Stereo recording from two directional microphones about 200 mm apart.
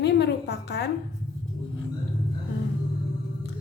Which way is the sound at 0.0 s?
55° left (ahead or behind).